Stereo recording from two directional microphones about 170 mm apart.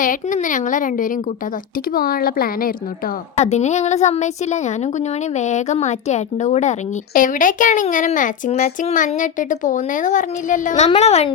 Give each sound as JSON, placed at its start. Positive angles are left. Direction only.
{"t": 0.0, "sound": "a woman's voice", "side_deg": 50}
{"t": 3.3, "sound": "a woman's voice", "side_deg": 40}